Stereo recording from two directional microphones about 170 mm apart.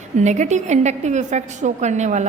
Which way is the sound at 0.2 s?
45° right (ahead or behind).